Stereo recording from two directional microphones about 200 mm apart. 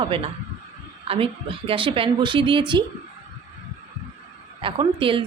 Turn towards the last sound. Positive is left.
turn(degrees=-25)  # may be behind; listen again after turning